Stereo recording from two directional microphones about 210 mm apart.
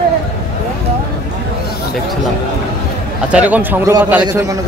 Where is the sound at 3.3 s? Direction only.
5° right (ahead or behind).